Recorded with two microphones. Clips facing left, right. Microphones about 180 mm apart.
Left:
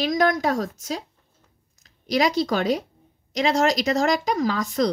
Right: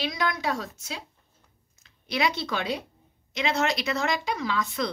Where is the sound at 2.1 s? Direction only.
40° left (ahead or behind).